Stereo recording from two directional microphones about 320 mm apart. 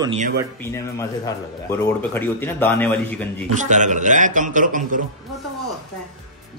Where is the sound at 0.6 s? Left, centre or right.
Centre.